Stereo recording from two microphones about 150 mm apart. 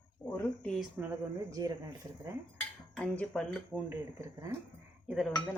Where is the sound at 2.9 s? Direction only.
5° left (ahead or behind).